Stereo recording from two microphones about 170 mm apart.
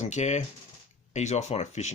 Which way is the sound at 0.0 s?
40° left (ahead or behind).